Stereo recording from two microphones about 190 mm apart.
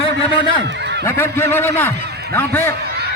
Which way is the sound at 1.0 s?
10° left (ahead or behind).